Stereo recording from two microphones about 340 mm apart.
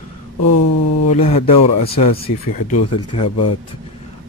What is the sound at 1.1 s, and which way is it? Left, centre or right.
Speech, centre.